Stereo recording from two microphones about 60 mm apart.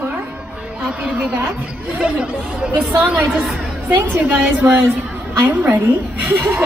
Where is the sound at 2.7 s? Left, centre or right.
Right.